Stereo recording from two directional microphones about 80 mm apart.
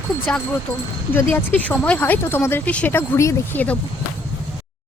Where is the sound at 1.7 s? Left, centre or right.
Centre.